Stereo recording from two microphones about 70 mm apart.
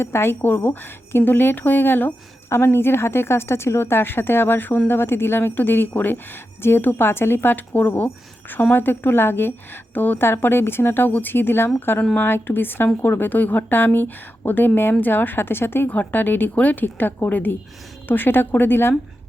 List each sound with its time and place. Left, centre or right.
0.0 s a woman's voice: left